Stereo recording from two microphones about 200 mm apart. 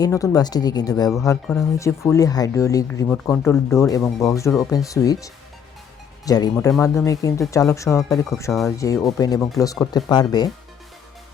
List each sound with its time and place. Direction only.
0.0 s speech: 20° left (ahead or behind)